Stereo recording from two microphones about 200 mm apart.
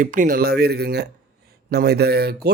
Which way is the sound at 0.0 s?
40° right (ahead or behind).